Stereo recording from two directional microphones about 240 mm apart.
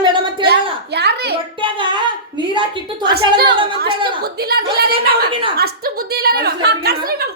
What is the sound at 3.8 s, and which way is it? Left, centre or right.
Speech, right.